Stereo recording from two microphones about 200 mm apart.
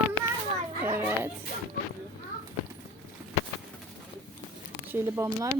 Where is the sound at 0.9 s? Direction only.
10° right (ahead or behind).